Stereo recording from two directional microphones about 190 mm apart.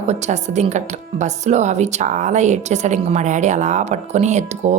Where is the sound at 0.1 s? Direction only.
35° right (ahead or behind).